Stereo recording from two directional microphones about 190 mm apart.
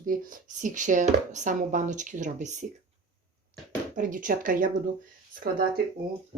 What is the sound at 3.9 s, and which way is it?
Speech, 45° right (ahead or behind).